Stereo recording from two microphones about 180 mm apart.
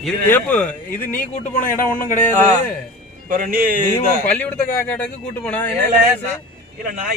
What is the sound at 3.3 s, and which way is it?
Speech, 50° right (ahead or behind).